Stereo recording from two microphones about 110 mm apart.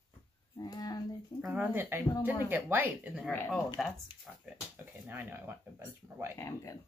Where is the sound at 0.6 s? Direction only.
35° left (ahead or behind).